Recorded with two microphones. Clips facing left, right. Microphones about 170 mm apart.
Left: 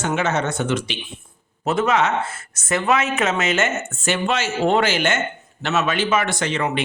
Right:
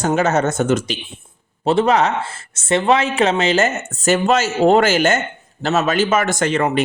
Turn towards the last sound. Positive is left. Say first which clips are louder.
# right 5 dB
turn(degrees=-50)  # may be behind; listen again after turning